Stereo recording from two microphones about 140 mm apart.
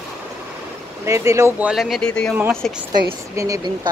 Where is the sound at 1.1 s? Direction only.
20° right (ahead or behind).